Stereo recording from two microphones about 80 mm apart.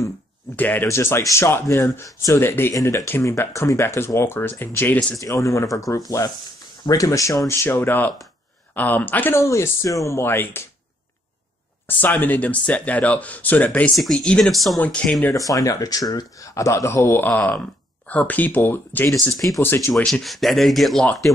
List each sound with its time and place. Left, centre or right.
0.6 s speech: left
0.8 s speech: left
5.2 s speech: left
9.4 s speech: left
10.2 s speech: left
12.0 s speech: left
14.5 s speech: centre
14.8 s speech: centre
15.3 s speech: left
20.1 s speech: centre